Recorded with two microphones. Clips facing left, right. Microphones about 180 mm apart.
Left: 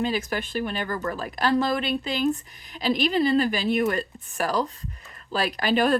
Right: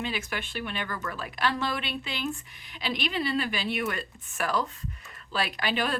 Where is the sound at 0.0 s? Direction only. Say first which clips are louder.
Left 7 dB; 40° left (ahead or behind).